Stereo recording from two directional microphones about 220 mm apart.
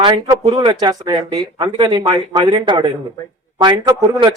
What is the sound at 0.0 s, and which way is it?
Speech, 20° right (ahead or behind).